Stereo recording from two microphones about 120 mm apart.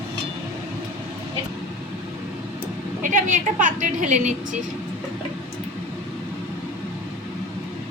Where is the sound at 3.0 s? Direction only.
90° right.